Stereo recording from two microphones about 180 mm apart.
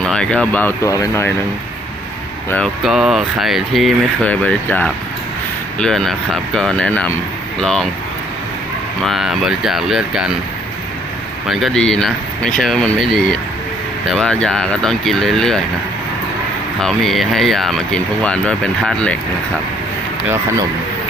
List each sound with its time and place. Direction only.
0.0 s speech: 5° left (ahead or behind)
2.8 s speech: 5° right (ahead or behind)
9.0 s speech: centre (ahead or behind)
11.4 s speech: centre (ahead or behind)
16.8 s speech: centre (ahead or behind)